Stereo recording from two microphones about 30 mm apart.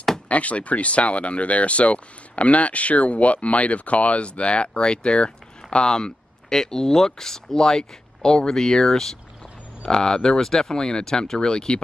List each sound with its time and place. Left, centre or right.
0.3 s speech: left